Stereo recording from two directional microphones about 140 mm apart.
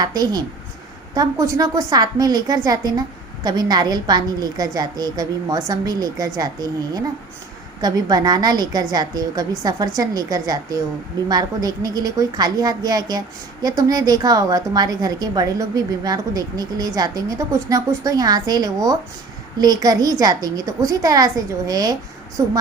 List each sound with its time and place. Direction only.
0.0 s a woman's voice: 30° right (ahead or behind)